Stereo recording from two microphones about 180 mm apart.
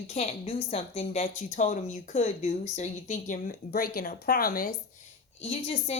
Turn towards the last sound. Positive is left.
turn(degrees=35)  # may be behind; listen again after turning